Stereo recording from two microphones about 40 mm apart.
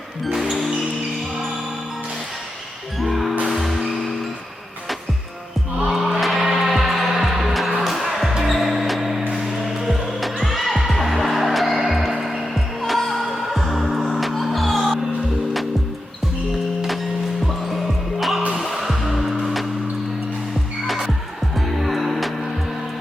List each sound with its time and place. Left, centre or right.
0.3 s music: centre
3.0 s music: centre
5.8 s music: centre
18.2 s music: centre
20.8 s music: centre